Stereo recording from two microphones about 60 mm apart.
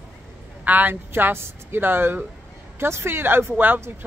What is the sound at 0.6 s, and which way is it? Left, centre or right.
Speech, right.